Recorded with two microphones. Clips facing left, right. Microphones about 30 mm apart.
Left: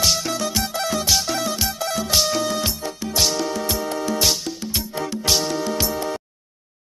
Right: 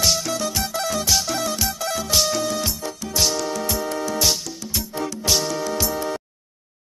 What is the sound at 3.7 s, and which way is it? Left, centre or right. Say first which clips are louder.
Music: left 1 dB; left.